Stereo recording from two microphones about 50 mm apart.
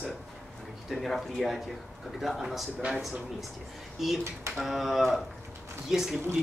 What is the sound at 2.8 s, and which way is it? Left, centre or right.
Speech, right.